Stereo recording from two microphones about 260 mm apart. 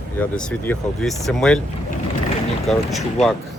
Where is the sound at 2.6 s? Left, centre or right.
Centre.